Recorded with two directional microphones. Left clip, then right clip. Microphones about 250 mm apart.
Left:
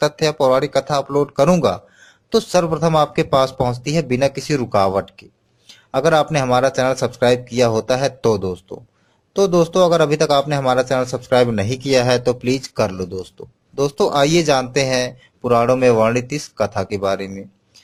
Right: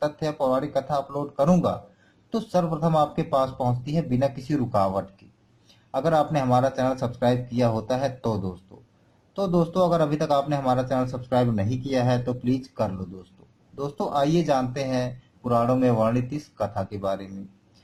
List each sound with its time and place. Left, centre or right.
0.0 s speech: left
2.3 s speech: left